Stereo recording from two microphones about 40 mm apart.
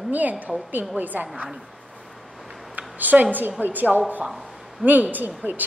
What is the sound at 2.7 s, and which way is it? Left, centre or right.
A woman's voice, right.